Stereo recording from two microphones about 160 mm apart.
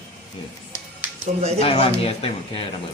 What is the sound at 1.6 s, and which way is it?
A man's voice, 40° left (ahead or behind).